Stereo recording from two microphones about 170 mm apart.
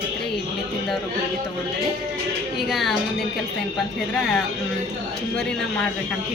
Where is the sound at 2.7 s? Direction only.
Centre (ahead or behind).